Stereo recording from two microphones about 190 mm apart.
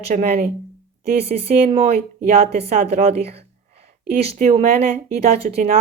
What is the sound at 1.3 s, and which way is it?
A woman's voice, 40° right (ahead or behind).